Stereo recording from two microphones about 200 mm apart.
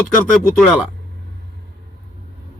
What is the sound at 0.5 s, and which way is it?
Speech, centre (ahead or behind).